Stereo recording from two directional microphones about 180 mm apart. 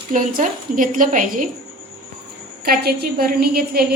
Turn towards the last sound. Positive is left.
turn(degrees=-60)  # may be behind; listen again after turning